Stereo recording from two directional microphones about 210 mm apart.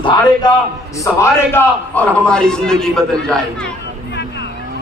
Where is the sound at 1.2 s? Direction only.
10° left (ahead or behind).